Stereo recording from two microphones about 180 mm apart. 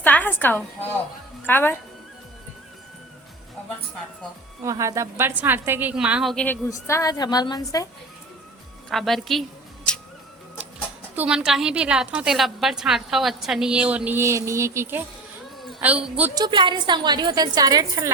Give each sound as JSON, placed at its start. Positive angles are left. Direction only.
{"t": 0.0, "sound": "a sound", "side_deg": 10}
{"t": 1.5, "sound": "speech", "side_deg": 10}
{"t": 4.6, "sound": "a woman's voice", "side_deg": -15}
{"t": 6.3, "sound": "a woman's voice", "side_deg": 10}
{"t": 8.9, "sound": "a woman's voice", "side_deg": 0}
{"t": 11.1, "sound": "a woman's voice", "side_deg": -5}
{"t": 16.3, "sound": "a woman's voice", "side_deg": -25}